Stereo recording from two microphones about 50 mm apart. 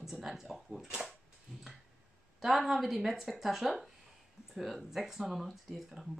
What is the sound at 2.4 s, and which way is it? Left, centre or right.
Speech, centre.